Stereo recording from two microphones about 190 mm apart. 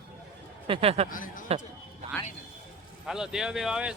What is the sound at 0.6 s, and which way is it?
Speech, 30° right (ahead or behind).